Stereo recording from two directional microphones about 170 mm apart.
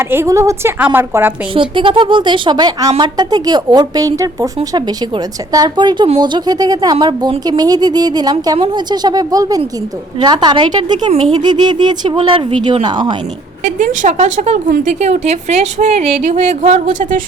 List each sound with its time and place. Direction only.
0.0 s speech: 15° right (ahead or behind)
1.5 s a woman's voice: 30° right (ahead or behind)
13.7 s a woman's voice: 45° right (ahead or behind)